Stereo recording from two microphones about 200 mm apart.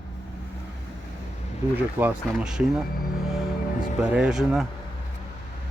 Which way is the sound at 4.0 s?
5° right (ahead or behind).